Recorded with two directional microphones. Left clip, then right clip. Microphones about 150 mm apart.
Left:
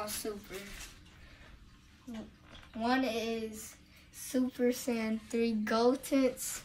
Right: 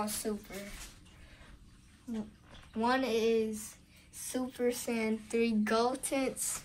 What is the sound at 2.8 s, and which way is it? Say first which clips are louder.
Speech: right 3 dB; 70° right (ahead or behind).